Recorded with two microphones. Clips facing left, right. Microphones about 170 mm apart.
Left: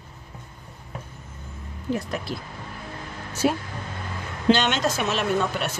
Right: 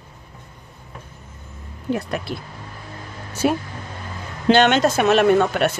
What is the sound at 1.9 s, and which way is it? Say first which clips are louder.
Speech: right 3 dB; 65° right (ahead or behind).